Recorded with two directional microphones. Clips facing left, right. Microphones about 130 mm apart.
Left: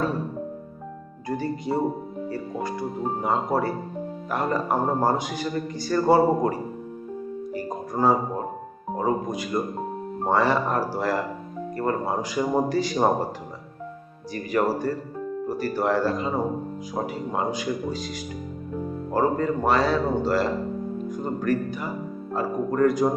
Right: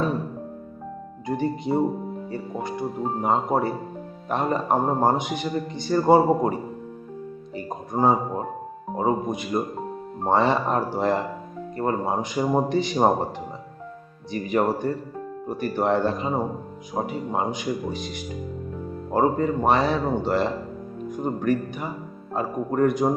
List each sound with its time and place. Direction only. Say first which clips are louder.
1.4 s speech: right 3 dB; 20° right (ahead or behind)
3.2 s speech: right 2 dB; 20° right (ahead or behind)
7.5 s music: right 2 dB; 20° right (ahead or behind)
9.0 s speech: right 1 dB; 20° right (ahead or behind)
14.3 s speech: right 1 dB; 20° right (ahead or behind)
19.1 s speech: right 2 dB; 20° right (ahead or behind)